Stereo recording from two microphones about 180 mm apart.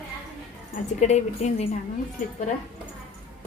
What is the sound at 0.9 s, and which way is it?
Speech, 40° left (ahead or behind).